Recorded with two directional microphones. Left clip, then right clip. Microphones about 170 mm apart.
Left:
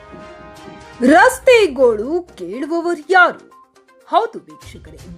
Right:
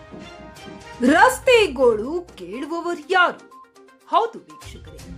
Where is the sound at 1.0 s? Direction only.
25° left (ahead or behind).